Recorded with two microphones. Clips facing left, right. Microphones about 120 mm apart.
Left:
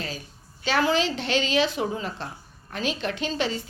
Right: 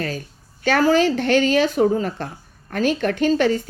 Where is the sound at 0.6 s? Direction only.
45° right (ahead or behind).